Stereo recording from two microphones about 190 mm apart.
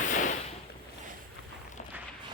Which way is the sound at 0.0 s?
40° left (ahead or behind).